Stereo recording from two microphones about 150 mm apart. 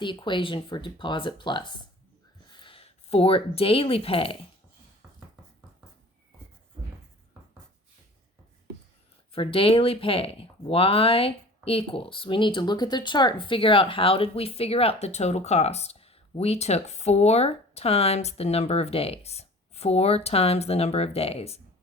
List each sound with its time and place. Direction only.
0.0 s speech: 30° left (ahead or behind)
9.3 s speech: 40° left (ahead or behind)